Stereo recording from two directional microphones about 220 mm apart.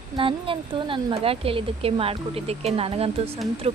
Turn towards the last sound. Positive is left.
turn(degrees=-25)  # may be behind; listen again after turning